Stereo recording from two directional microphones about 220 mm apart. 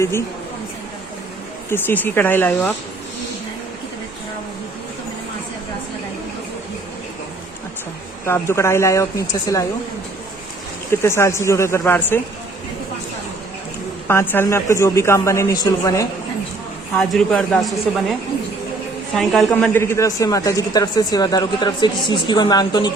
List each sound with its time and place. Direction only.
0.0 s a woman's voice: 10° left (ahead or behind)
1.7 s a woman's voice: 10° left (ahead or behind)
8.2 s a woman's voice: 10° left (ahead or behind)
11.0 s a woman's voice: 10° left (ahead or behind)
14.1 s a woman's voice: 10° left (ahead or behind)
16.9 s a woman's voice: centre (ahead or behind); by 22.9 s 20° left (ahead or behind)